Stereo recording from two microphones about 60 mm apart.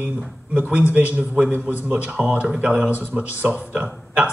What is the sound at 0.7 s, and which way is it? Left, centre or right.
Speech, right.